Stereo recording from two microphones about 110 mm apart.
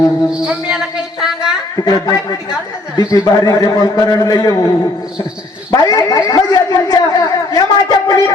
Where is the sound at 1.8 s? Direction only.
35° left (ahead or behind).